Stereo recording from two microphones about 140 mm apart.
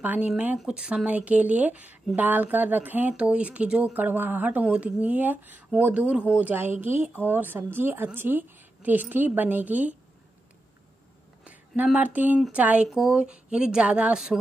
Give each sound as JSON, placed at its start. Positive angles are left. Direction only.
{"t": 0.0, "sound": "speech", "side_deg": -10}
{"t": 11.4, "sound": "speech", "side_deg": -10}